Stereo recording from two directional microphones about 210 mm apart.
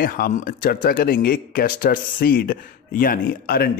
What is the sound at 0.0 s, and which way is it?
Speech, 40° left (ahead or behind).